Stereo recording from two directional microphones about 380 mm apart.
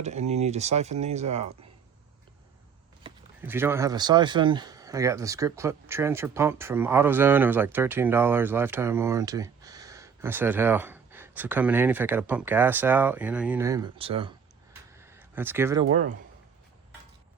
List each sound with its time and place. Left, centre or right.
0.0 s speech: centre
3.0 s speech: centre
14.9 s a sound: centre